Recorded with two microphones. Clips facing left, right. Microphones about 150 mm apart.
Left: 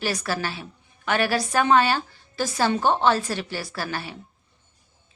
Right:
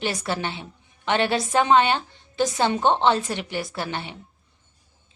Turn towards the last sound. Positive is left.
turn(degrees=-20)  # may be behind; listen again after turning